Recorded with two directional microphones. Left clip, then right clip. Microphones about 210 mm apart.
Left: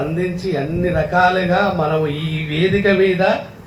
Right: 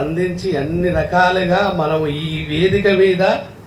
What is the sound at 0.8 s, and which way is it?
Speech, 5° right (ahead or behind).